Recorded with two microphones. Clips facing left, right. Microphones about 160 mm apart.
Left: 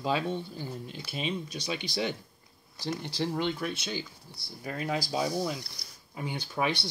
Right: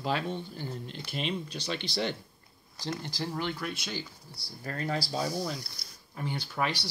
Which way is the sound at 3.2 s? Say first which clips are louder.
Left 6 dB; 20° left (ahead or behind).